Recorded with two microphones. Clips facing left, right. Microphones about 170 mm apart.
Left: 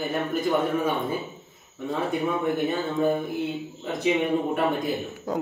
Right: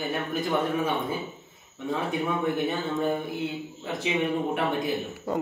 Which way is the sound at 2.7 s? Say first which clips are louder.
Left 3 dB; centre (ahead or behind).